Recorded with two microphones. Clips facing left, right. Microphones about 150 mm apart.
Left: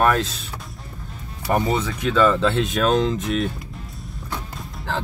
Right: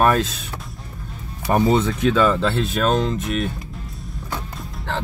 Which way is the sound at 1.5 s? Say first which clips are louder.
Right 4 dB; 20° right (ahead or behind).